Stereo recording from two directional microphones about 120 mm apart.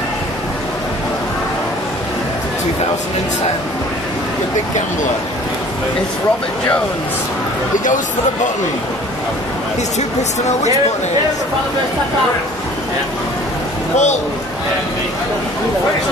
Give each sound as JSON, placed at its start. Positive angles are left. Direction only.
{"t": 13.9, "sound": "speech", "side_deg": 75}